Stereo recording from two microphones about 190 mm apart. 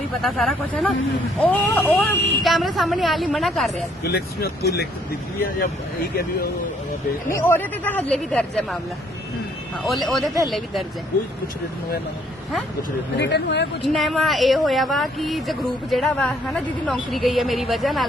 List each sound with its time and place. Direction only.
0.2 s speech: centre (ahead or behind)
4.0 s speech: 55° left (ahead or behind)
7.3 s speech: 10° left (ahead or behind)
9.8 s speech: centre (ahead or behind)
13.1 s speech: 65° left (ahead or behind)
13.8 s speech: centre (ahead or behind)